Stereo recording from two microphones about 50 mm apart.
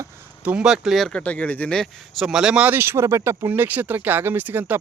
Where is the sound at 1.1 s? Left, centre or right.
Left.